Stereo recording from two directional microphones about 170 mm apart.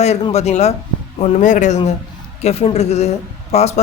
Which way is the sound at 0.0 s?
40° left (ahead or behind).